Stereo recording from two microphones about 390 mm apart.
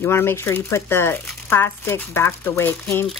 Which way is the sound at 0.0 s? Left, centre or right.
Centre.